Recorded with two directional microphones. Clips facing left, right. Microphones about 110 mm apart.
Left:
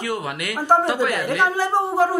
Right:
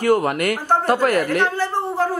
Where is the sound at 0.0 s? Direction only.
50° right (ahead or behind).